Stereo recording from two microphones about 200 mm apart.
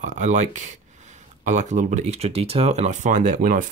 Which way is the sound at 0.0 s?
35° right (ahead or behind).